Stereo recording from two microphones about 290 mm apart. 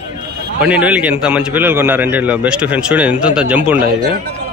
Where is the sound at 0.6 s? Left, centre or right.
Centre.